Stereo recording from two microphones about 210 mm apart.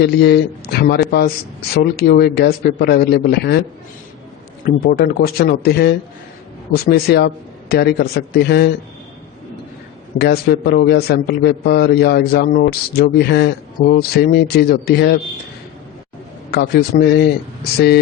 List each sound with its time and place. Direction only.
0.0 s a man's voice: 50° left (ahead or behind)
4.6 s a man's voice: 45° left (ahead or behind)
10.2 s a man's voice: 50° left (ahead or behind)
16.5 s a man's voice: 50° left (ahead or behind)